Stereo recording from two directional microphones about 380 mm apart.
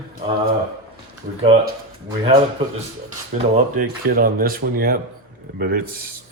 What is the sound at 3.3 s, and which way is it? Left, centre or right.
Speech, right.